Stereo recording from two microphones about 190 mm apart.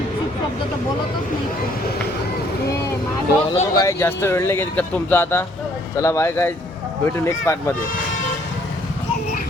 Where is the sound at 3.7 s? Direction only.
15° left (ahead or behind).